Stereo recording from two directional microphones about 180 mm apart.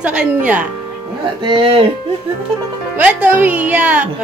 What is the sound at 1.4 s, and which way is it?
Speech, 30° right (ahead or behind).